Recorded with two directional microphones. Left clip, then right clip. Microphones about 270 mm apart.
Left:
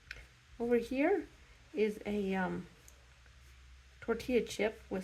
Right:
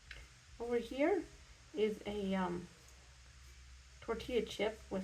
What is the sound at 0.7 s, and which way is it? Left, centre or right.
Speech, left.